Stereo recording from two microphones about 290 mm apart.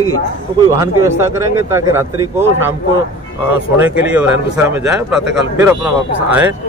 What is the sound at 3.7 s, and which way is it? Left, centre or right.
Speech, centre.